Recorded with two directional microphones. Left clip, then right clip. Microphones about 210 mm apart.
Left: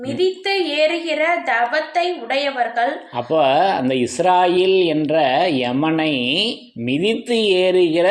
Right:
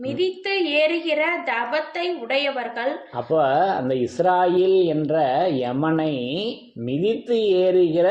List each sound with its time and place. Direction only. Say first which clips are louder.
0.2 s a woman's voice: left 5 dB; 50° right (ahead or behind)
3.2 s speech: left 4 dB; 20° left (ahead or behind)